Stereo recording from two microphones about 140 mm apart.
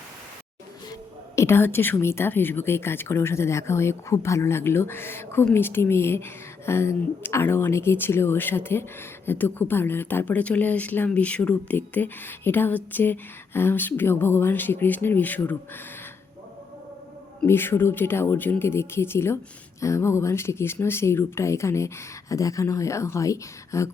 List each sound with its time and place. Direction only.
1.4 s speech: 15° left (ahead or behind)
17.4 s speech: 15° left (ahead or behind)